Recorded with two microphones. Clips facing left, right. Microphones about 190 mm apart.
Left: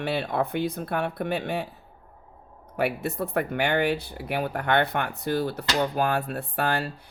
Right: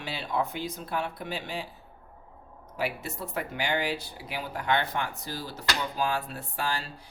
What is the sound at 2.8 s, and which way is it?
Speech, 60° left (ahead or behind).